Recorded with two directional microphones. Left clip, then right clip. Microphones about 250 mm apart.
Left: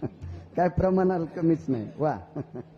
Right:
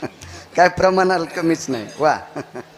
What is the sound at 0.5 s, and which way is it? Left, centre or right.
A man's voice, centre.